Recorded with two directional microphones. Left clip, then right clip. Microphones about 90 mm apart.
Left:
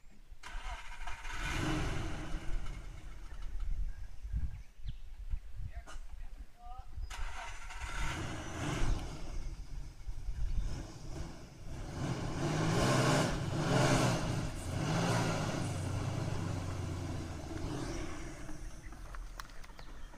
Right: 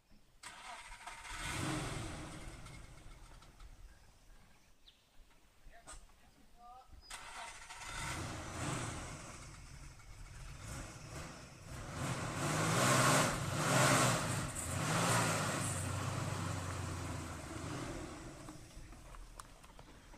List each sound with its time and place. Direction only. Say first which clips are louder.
0.4 s vehicle: left 3 dB; 30° right (ahead or behind)
7.1 s vehicle: left 2 dB; 25° right (ahead or behind)
10.7 s vehicle: even; 20° right (ahead or behind)
17.9 s vehicle: left 4 dB; 30° right (ahead or behind)
18.3 s vehicle: left 3 dB; 15° right (ahead or behind)